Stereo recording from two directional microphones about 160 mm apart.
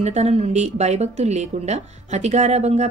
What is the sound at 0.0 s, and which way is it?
Speech, 45° right (ahead or behind).